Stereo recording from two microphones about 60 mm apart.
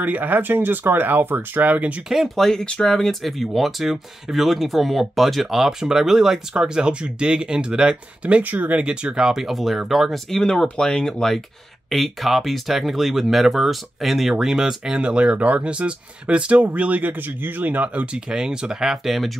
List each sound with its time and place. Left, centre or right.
0.0 s speech: right
2.0 s speech: centre
8.4 s speech: right
8.8 s speech: centre
10.4 s speech: centre; by 18.0 s right
18.1 s speech: centre